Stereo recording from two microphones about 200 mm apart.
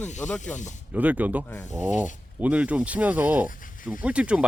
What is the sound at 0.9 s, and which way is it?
Speech, 10° right (ahead or behind).